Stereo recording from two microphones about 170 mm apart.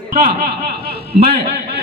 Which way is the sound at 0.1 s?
65° right (ahead or behind).